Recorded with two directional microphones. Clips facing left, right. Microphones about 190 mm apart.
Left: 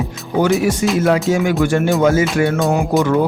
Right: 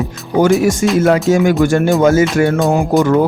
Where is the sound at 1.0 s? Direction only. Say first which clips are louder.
Right 4 dB; 45° right (ahead or behind).